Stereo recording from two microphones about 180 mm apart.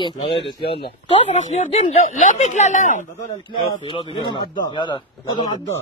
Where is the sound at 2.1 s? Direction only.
45° left (ahead or behind).